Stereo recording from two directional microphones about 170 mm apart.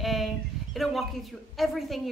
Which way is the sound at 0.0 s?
Centre (ahead or behind).